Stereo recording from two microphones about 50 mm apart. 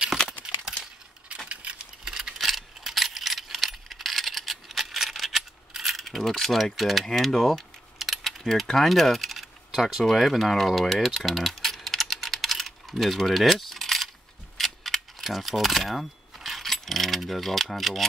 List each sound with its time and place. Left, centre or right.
1.5 s keys jangling: right
2.0 s keys jangling: centre